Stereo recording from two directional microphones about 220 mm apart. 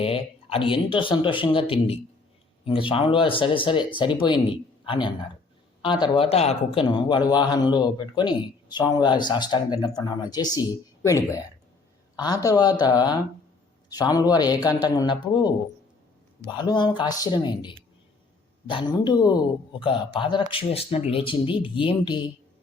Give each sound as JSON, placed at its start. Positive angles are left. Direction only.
{"t": 0.0, "sound": "a woman's voice", "side_deg": 25}
{"t": 16.6, "sound": "speech", "side_deg": 20}